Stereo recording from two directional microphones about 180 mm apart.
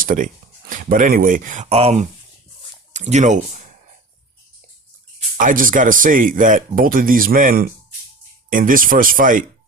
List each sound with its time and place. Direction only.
0.0 s speech: 50° right (ahead or behind)
5.4 s speech: 50° right (ahead or behind)